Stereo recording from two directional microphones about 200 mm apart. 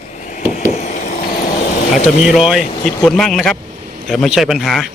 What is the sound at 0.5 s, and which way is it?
Vehicle, 35° left (ahead or behind).